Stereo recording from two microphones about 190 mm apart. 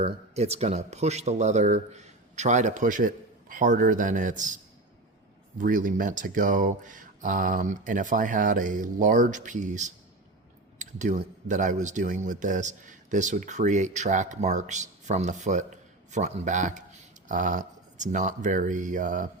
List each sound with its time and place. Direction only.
0.0 s a man's voice: 35° right (ahead or behind)
10.8 s a sound: 40° right (ahead or behind)
11.4 s a man's voice: 40° right (ahead or behind)